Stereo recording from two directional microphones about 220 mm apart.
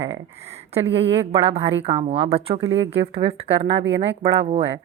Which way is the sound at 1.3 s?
25° right (ahead or behind).